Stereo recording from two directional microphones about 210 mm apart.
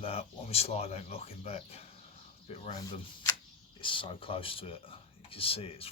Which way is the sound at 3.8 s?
25° left (ahead or behind).